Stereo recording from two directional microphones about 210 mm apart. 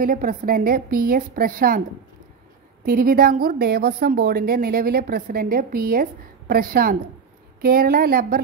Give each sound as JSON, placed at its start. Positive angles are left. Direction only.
{"t": 0.0, "sound": "speech", "side_deg": -40}
{"t": 2.8, "sound": "speech", "side_deg": -45}